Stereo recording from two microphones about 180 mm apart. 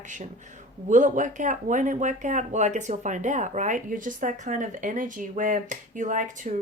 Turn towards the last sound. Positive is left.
turn(degrees=-45)  # may be behind; listen again after turning